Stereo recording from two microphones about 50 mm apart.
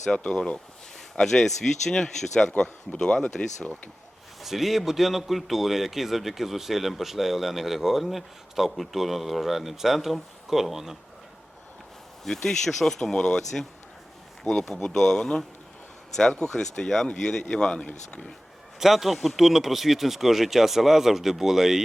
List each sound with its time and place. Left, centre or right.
0.3 s speech: centre
4.4 s a man's voice: centre
12.2 s speech: centre
16.4 s speech: centre
18.8 s a man's voice: centre